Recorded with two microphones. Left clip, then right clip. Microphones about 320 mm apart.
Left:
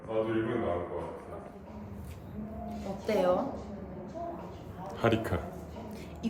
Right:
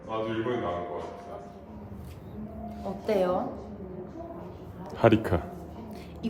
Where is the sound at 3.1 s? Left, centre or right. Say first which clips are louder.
Right 1 dB; centre.